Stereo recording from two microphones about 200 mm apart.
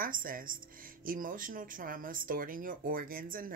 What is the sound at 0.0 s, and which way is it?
Speech, 45° right (ahead or behind).